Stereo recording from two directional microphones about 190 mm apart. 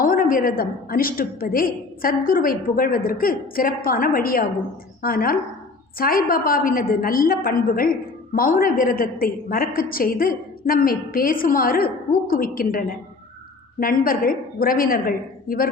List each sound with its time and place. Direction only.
0.0 s a woman's voice: 45° left (ahead or behind)